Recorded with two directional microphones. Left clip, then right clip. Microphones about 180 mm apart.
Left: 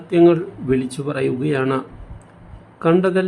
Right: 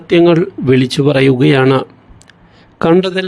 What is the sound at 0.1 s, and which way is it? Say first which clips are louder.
A man's voice: right 5 dB; 45° right (ahead or behind).